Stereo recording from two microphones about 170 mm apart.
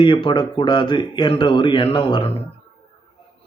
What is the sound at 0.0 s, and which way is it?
Speech, 30° left (ahead or behind).